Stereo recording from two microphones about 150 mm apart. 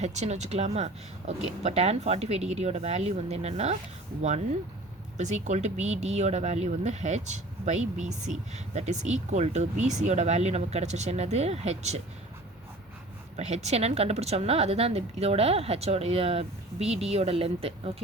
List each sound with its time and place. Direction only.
0.0 s speech: 50° right (ahead or behind)
5.1 s speech: 50° right (ahead or behind)
13.3 s speech: 50° right (ahead or behind)